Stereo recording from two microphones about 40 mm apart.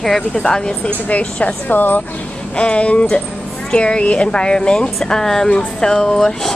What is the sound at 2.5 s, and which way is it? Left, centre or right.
Speech, left.